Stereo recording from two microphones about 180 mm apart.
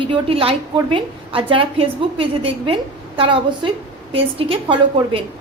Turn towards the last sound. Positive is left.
turn(degrees=-30)  # may be behind; listen again after turning